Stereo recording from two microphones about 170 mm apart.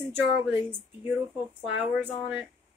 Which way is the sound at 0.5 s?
10° right (ahead or behind).